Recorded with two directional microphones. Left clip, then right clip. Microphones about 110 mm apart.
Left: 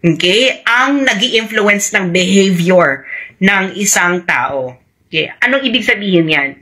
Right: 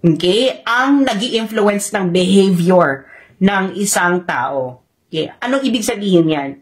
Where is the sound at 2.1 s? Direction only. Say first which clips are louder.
Even; 25° right (ahead or behind).